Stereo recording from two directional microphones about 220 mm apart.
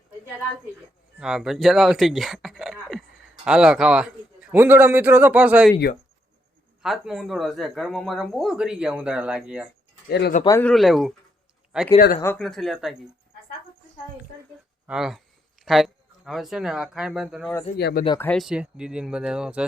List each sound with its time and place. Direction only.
1.2 s a man's voice: centre (ahead or behind)
6.8 s speech: centre (ahead or behind)
10.1 s speech: 45° left (ahead or behind)
10.4 s speech: 15° left (ahead or behind)
10.7 s speech: centre (ahead or behind)
11.9 s speech: 45° left (ahead or behind)
12.2 s speech: 5° left (ahead or behind)
14.8 s speech: centre (ahead or behind)
17.7 s speech: 45° left (ahead or behind)
18.2 s speech: 5° left (ahead or behind)